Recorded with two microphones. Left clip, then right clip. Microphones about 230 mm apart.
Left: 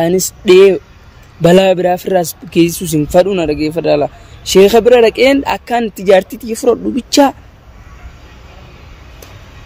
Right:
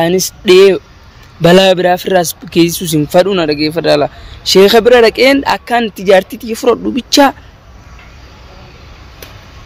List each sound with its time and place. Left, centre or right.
0.0 s a man's voice: centre